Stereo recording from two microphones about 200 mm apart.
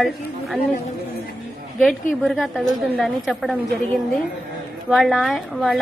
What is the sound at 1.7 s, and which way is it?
A woman's voice, 5° left (ahead or behind).